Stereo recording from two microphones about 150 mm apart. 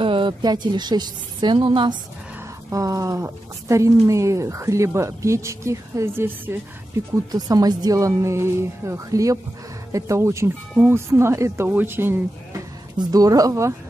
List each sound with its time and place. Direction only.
0.0 s speech: 35° right (ahead or behind)
2.7 s speech: 20° right (ahead or behind)
7.2 s speech: 25° right (ahead or behind)